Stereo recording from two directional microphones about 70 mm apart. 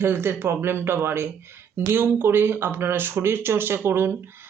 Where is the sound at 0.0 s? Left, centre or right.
Right.